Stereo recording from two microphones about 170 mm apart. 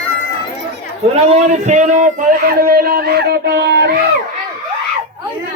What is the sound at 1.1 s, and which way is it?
Speech, 40° right (ahead or behind).